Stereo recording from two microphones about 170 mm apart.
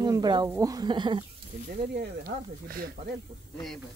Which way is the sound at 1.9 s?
65° right (ahead or behind).